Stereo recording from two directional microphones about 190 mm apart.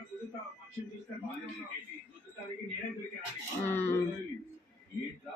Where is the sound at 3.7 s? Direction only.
15° left (ahead or behind).